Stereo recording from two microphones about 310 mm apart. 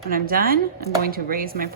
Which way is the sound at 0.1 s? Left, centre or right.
Right.